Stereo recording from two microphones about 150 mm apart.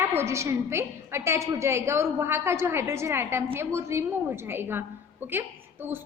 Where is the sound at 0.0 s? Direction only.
15° right (ahead or behind).